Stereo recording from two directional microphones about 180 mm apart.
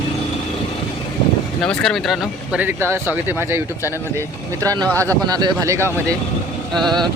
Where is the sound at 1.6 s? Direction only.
5° left (ahead or behind); by 3.6 s 15° right (ahead or behind).